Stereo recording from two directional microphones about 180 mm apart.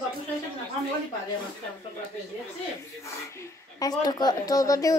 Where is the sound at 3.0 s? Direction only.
15° left (ahead or behind).